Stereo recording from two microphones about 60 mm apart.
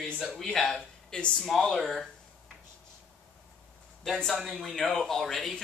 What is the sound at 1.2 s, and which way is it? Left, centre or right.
Speech, centre.